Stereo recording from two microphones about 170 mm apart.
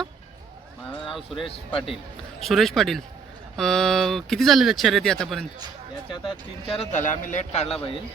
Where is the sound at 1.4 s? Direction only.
30° left (ahead or behind).